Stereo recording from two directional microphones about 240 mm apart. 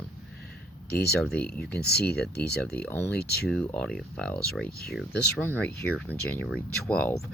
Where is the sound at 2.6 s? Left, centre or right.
Centre.